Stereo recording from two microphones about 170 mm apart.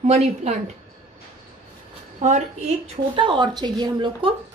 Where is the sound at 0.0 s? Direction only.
40° right (ahead or behind).